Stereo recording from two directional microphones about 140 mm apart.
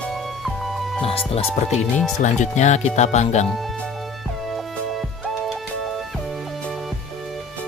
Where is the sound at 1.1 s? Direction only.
40° left (ahead or behind).